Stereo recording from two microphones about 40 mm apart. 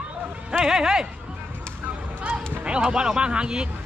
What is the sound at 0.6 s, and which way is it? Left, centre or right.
Speech, centre.